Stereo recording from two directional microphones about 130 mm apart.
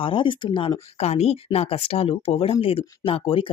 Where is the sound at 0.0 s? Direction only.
40° left (ahead or behind).